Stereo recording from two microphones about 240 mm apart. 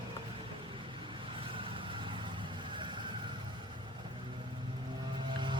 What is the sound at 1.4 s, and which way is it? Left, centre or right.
Vehicle, right.